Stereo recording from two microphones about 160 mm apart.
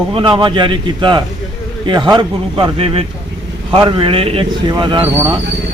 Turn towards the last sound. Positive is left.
turn(degrees=-20)  # may be behind; listen again after turning